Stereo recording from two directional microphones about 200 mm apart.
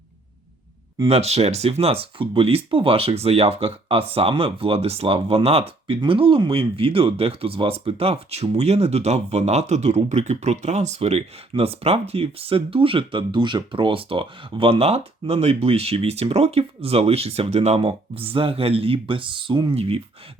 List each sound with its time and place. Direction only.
0.9 s speech: 30° right (ahead or behind)